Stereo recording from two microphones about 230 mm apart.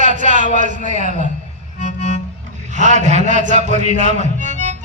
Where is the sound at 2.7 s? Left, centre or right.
Right.